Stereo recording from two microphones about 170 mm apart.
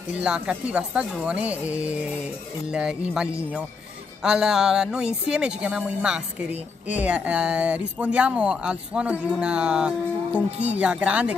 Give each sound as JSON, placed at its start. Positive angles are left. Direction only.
{"t": 0.1, "sound": "a woman's voice", "side_deg": -5}
{"t": 2.7, "sound": "music", "side_deg": -5}
{"t": 4.2, "sound": "a woman's voice", "side_deg": -5}